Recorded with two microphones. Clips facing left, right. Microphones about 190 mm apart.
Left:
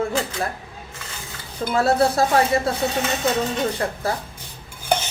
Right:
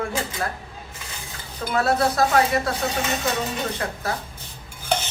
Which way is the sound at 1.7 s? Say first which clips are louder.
Left 3 dB; 30° left (ahead or behind).